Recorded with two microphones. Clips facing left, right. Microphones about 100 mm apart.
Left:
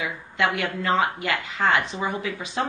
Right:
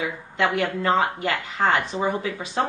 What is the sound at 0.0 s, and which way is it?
A woman's voice, 40° right (ahead or behind).